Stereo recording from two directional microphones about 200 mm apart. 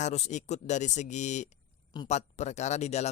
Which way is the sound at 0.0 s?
35° left (ahead or behind).